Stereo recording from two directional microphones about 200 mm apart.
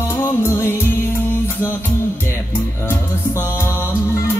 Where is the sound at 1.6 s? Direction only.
10° right (ahead or behind).